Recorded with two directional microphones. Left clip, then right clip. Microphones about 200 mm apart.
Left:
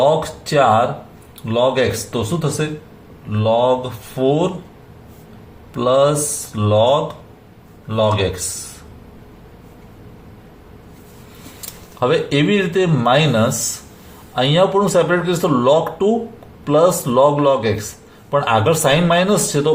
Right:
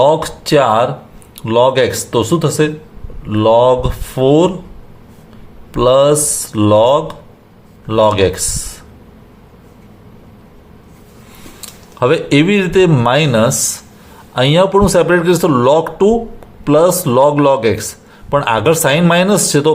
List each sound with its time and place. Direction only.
0.0 s speech: 50° right (ahead or behind)
5.7 s speech: 50° right (ahead or behind)
11.9 s speech: 40° right (ahead or behind)